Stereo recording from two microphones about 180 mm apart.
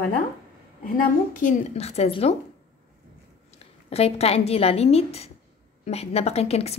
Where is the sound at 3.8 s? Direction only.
35° left (ahead or behind).